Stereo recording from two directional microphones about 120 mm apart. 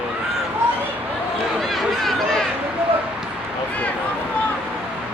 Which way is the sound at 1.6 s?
Centre (ahead or behind).